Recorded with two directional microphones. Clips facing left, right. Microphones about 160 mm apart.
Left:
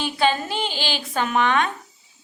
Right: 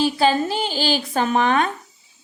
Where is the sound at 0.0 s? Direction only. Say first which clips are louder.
Right 4 dB; 35° right (ahead or behind).